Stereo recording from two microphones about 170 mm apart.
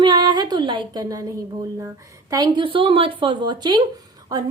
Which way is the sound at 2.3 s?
25° right (ahead or behind).